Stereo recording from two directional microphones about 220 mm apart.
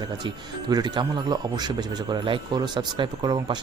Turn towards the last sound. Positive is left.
turn(degrees=-20)  # may be behind; listen again after turning